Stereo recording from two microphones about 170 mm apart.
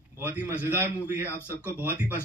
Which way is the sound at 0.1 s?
15° right (ahead or behind).